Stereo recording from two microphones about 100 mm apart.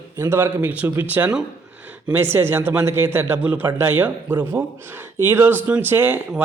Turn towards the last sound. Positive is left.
turn(degrees=-20)  # may be behind; listen again after turning